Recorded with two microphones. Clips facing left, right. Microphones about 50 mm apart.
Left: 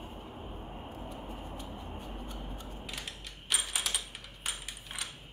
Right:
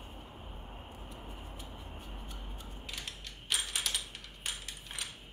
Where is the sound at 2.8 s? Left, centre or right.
Centre.